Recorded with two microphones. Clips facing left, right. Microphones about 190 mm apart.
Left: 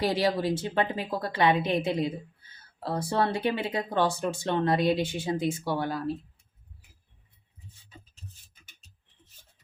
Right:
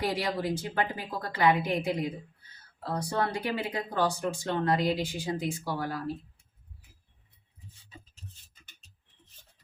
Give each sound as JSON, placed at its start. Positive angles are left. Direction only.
{"t": 0.0, "sound": "speech", "side_deg": 30}